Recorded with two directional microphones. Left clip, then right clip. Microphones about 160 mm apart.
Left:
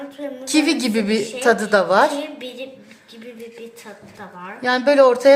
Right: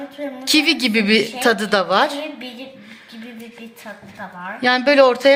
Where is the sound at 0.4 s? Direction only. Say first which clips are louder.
Right 3 dB; 15° right (ahead or behind).